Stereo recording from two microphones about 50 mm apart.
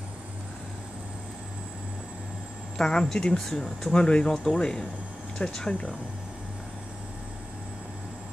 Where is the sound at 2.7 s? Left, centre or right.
Centre.